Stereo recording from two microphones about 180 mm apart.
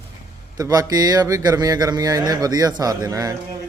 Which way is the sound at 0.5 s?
20° right (ahead or behind).